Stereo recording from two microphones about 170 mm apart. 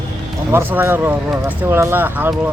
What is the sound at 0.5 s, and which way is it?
Speech, 15° right (ahead or behind).